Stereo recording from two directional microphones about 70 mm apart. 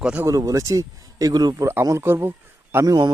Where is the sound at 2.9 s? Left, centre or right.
Right.